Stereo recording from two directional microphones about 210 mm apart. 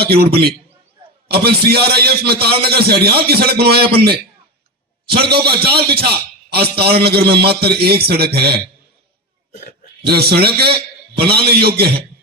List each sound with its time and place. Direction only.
0.1 s a man's voice: 50° right (ahead or behind)
1.4 s a man's voice: 50° right (ahead or behind)
9.5 s speech: 35° left (ahead or behind)
10.0 s a man's voice: 50° right (ahead or behind)